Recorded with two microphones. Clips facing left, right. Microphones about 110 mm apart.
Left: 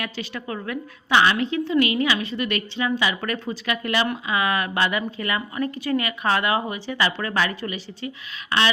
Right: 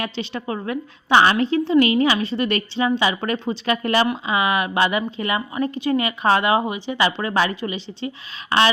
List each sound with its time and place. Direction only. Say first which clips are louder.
0.0 s a woman's voice: right 4 dB; 25° right (ahead or behind)
4.3 s a woman's voice: right 3 dB; 20° right (ahead or behind)